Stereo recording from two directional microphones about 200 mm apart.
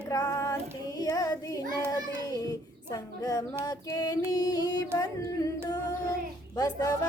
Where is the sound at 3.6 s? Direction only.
20° left (ahead or behind).